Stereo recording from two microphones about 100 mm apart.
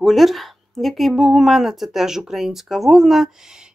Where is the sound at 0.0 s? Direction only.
Centre (ahead or behind).